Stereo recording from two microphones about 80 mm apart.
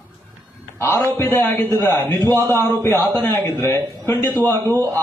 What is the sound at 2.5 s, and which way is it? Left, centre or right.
A man's voice, left.